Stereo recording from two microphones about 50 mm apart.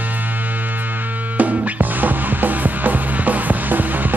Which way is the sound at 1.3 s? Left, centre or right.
Right.